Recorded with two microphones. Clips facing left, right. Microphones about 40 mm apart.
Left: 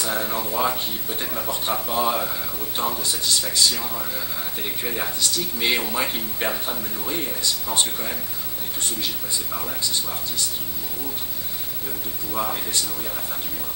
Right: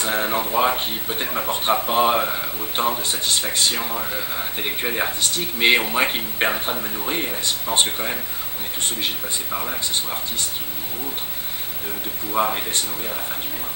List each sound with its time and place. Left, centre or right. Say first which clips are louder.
0.0 s speech: right 4 dB; right
9.5 s speech: right 7 dB; right
12.3 s speech: right 5 dB; right